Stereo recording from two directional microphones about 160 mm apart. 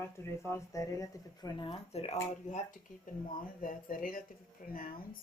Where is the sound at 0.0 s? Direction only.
15° left (ahead or behind); by 2.1 s 40° left (ahead or behind).